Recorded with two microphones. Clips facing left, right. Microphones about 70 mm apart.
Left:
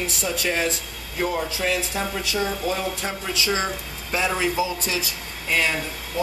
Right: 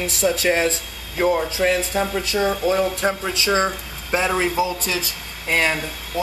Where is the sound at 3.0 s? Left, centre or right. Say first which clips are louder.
Right 5 dB; right.